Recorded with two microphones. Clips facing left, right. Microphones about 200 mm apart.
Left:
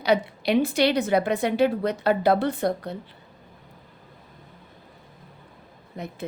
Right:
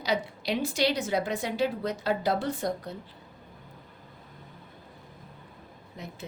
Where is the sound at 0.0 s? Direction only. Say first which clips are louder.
Left 7 dB; 60° left (ahead or behind).